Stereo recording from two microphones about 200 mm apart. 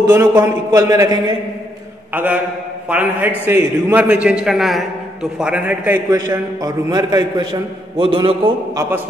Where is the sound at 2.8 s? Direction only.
10° right (ahead or behind); by 8.3 s 25° right (ahead or behind).